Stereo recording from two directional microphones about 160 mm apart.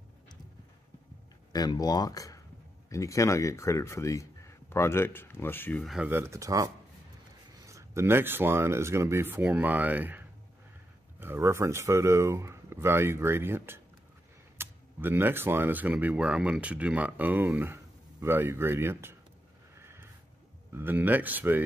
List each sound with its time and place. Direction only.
1.5 s speech: 25° left (ahead or behind); by 6.0 s centre (ahead or behind)
6.0 s speech: 15° right (ahead or behind)
19.8 s a sound: 15° right (ahead or behind)
20.7 s speech: 10° right (ahead or behind)